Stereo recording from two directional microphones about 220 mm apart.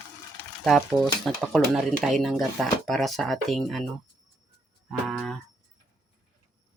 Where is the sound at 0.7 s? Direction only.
Centre (ahead or behind).